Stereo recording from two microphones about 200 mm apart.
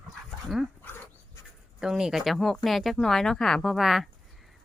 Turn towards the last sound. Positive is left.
turn(degrees=0)  # may be behind; listen again after turning